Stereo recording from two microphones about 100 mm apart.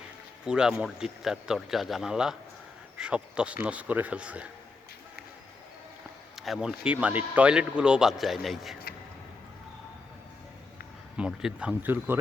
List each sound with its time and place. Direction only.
0.4 s speech: 10° right (ahead or behind)
6.3 s speech: centre (ahead or behind)
11.3 s speech: 5° right (ahead or behind)
11.7 s speech: 20° right (ahead or behind)